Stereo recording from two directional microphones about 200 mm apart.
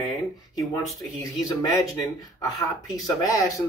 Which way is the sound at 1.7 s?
15° left (ahead or behind).